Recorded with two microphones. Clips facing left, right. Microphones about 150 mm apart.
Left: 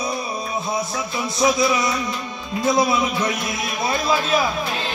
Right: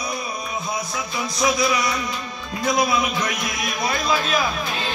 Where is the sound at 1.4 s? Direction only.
25° left (ahead or behind).